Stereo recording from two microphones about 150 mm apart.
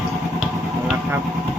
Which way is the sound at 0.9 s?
10° right (ahead or behind).